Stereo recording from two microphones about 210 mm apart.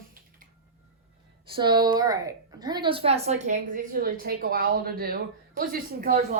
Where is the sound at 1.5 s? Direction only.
20° right (ahead or behind); by 6.3 s 45° right (ahead or behind).